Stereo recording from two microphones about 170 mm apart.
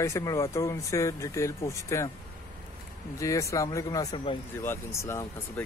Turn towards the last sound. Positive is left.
turn(degrees=15)  # may be behind; listen again after turning